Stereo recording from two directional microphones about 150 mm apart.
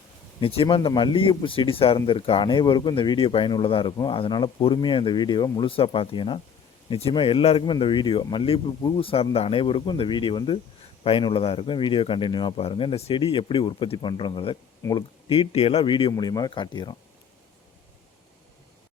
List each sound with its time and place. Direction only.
0.3 s speech: 40° left (ahead or behind)